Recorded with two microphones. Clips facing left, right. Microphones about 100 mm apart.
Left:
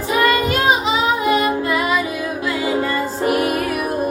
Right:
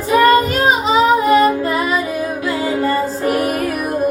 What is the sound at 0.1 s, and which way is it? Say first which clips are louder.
Child singing: right 5 dB; 40° right (ahead or behind).